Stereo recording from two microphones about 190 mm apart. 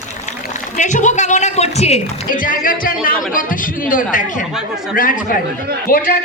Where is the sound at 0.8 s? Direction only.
40° left (ahead or behind).